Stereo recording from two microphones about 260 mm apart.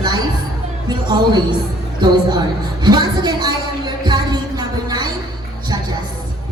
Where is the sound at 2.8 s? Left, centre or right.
Centre.